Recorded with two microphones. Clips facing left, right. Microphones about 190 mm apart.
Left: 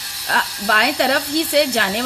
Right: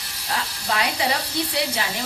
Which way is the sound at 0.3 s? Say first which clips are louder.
Left 5 dB; 70° left (ahead or behind).